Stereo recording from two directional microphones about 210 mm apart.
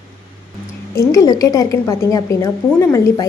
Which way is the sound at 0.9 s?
15° left (ahead or behind).